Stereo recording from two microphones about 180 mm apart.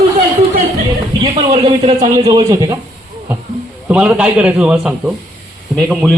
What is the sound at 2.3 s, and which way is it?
Speech, 20° right (ahead or behind).